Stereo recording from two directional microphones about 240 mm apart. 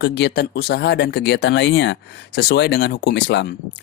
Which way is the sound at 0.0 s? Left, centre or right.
Left.